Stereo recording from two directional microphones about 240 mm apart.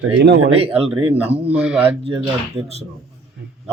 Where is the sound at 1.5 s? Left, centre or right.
Centre.